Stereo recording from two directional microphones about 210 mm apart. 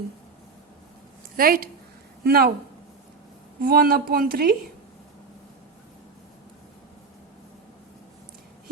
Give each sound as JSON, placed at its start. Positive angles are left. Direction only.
{"t": 1.4, "sound": "a woman's voice", "side_deg": -45}
{"t": 3.6, "sound": "a woman's voice", "side_deg": -45}